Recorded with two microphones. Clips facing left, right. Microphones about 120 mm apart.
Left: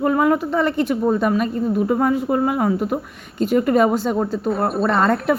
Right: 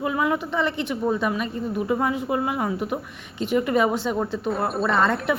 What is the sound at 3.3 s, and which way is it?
Speech, 45° left (ahead or behind).